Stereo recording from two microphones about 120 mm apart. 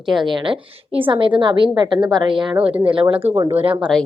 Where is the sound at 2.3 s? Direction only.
5° right (ahead or behind).